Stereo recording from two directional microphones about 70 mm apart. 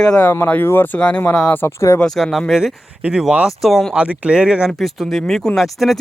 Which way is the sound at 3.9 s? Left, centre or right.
Centre.